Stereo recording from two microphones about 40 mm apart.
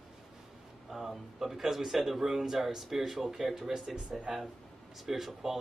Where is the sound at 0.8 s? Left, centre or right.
Centre.